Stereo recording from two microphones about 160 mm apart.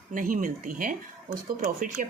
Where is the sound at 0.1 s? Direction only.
55° right (ahead or behind).